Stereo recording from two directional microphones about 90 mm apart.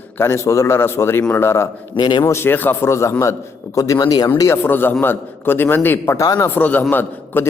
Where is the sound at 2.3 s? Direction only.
25° left (ahead or behind); by 4.3 s 45° left (ahead or behind).